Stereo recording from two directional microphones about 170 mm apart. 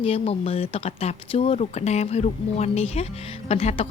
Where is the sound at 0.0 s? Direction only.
35° left (ahead or behind).